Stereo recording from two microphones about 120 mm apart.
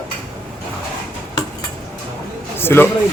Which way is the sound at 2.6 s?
20° left (ahead or behind).